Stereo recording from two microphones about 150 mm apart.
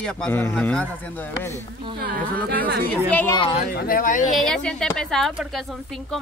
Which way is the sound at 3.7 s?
75° left (ahead or behind).